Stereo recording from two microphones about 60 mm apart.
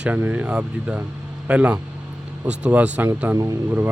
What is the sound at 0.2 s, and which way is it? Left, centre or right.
Speech, right.